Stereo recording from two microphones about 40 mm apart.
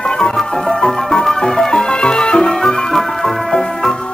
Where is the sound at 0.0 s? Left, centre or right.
Centre.